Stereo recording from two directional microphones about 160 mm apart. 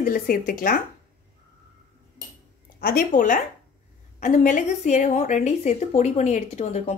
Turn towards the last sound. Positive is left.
turn(degrees=45)  # may be behind; listen again after turning